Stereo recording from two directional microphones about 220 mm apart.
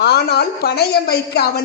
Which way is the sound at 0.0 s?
45° left (ahead or behind).